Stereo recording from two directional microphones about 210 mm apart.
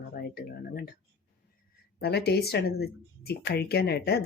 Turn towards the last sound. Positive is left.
turn(degrees=50)  # may be behind; listen again after turning